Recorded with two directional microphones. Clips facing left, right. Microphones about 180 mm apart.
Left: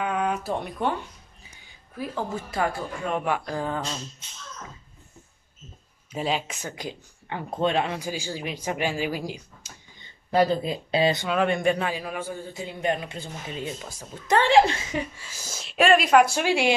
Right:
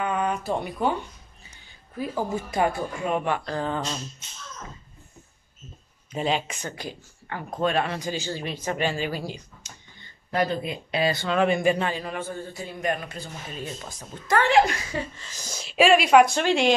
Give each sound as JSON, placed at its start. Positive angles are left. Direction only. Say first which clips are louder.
{"t": 0.0, "sound": "speech", "louder": "even", "side_deg": 0}
{"t": 2.5, "sound": "speech", "louder": "right 3 dB", "side_deg": -20}
{"t": 3.1, "sound": "speech", "louder": "even", "side_deg": 0}
{"t": 6.1, "sound": "speech", "louder": "right 1 dB", "side_deg": 5}
{"t": 6.7, "sound": "a man's voice", "louder": "left 1 dB", "side_deg": 15}
{"t": 10.3, "sound": "speech", "louder": "left 4 dB", "side_deg": 30}
{"t": 11.2, "sound": "a man's voice", "louder": "right 1 dB", "side_deg": 0}
{"t": 13.7, "sound": "a man's voice", "louder": "even", "side_deg": 5}
{"t": 14.2, "sound": "speech", "louder": "left 1 dB", "side_deg": 25}
{"t": 15.1, "sound": "speech", "louder": "right 1 dB", "side_deg": 10}